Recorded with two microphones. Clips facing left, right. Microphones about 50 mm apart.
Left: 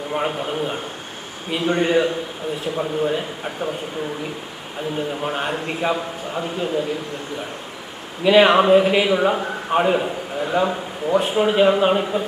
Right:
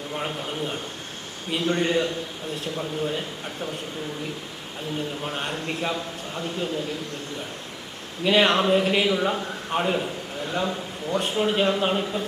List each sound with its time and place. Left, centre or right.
0.1 s a man's voice: left
4.9 s a man's voice: centre
8.2 s a man's voice: centre